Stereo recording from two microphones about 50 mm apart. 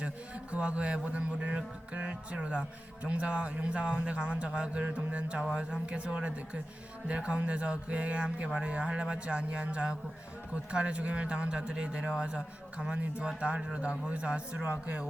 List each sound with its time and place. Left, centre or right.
0.5 s speech: right